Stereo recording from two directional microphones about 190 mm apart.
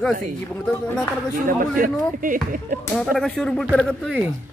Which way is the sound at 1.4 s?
45° right (ahead or behind).